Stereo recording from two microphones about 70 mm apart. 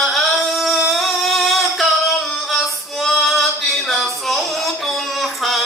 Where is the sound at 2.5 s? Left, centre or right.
Centre.